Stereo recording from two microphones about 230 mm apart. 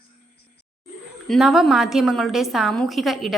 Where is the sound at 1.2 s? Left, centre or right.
Centre.